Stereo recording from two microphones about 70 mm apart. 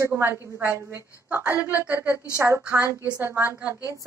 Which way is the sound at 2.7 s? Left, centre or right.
Right.